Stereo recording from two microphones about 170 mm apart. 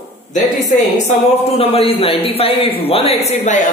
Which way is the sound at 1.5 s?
35° left (ahead or behind).